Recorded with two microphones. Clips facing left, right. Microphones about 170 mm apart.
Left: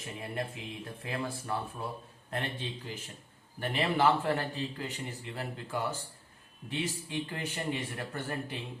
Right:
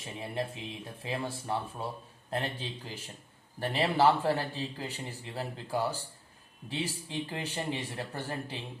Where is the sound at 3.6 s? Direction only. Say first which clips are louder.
Right 2 dB; 35° right (ahead or behind).